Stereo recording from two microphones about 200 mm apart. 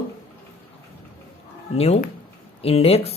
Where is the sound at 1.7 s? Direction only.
30° left (ahead or behind).